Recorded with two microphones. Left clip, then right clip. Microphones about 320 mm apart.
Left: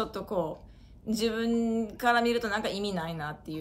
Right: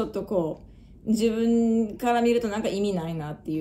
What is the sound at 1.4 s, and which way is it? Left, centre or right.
Speech, left.